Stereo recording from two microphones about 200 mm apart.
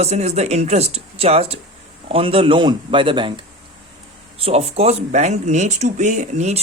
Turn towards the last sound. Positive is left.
turn(degrees=-35)  # may be behind; listen again after turning